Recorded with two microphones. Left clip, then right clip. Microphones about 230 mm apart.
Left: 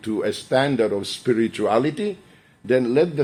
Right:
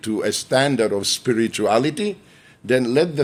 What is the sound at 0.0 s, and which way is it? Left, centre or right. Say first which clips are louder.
Speech: right 2 dB; right.